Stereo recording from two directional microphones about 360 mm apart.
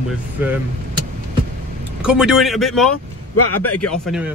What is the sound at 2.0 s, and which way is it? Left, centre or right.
Speech, centre.